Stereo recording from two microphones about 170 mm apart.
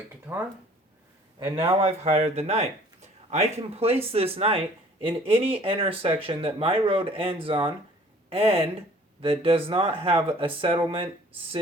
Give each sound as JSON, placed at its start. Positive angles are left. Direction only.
{"t": 0.3, "sound": "speech", "side_deg": -10}
{"t": 1.5, "sound": "speech", "side_deg": -35}